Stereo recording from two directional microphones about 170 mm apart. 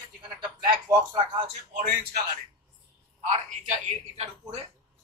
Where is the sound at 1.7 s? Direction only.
60° right (ahead or behind).